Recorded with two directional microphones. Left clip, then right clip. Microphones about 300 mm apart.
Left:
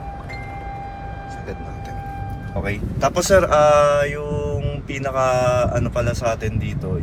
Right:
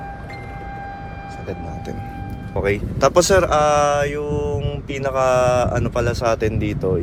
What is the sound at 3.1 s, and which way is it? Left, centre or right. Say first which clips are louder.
Speech: left 1 dB; centre.